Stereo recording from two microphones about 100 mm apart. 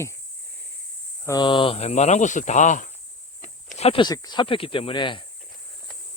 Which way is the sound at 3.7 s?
90° left.